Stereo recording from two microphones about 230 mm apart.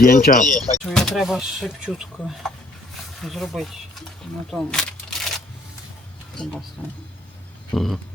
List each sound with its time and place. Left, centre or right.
0.0 s speech: left
0.9 s speech: centre
4.5 s a sound: centre
6.4 s speech: centre
7.7 s speech: centre